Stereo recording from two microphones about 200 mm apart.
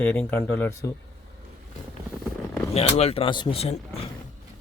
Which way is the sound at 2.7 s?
30° left (ahead or behind).